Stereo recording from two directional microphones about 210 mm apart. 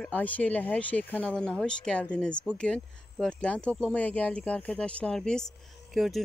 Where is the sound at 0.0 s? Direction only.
5° left (ahead or behind).